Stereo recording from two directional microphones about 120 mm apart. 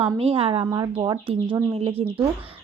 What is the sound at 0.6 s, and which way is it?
Speech, 35° right (ahead or behind).